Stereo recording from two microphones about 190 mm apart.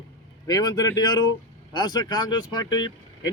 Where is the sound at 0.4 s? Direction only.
20° left (ahead or behind).